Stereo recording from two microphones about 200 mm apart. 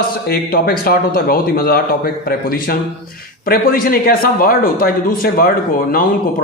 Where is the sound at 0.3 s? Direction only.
50° left (ahead or behind).